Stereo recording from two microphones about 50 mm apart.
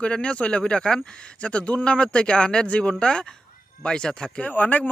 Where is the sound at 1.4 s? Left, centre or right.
Left.